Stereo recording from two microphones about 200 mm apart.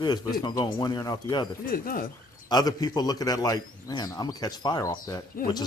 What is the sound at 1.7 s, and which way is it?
Speech, 45° left (ahead or behind).